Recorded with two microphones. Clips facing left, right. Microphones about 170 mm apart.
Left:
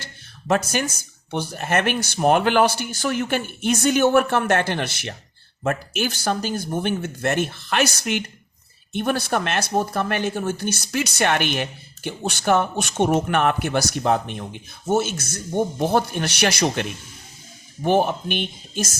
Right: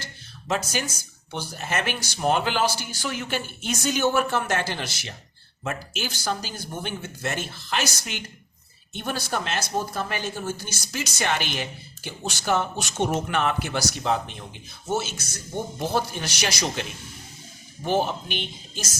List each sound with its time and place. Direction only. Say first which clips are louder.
0.0 s a sound: left 1 dB; 55° left (ahead or behind)
1.3 s speech: left 7 dB; 55° left (ahead or behind)
17.8 s speech: left 5 dB; 55° left (ahead or behind)